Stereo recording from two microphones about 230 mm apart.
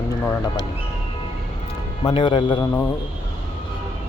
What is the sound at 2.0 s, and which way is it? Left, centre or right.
Speech, left.